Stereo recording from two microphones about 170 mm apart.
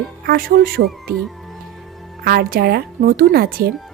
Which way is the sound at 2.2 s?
65° right (ahead or behind).